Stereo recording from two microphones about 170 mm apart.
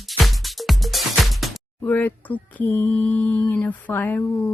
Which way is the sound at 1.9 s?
10° left (ahead or behind).